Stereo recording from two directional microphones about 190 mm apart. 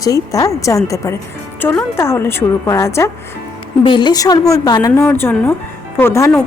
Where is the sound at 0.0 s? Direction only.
20° left (ahead or behind).